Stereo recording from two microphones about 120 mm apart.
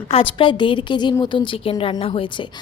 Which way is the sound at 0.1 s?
50° left (ahead or behind).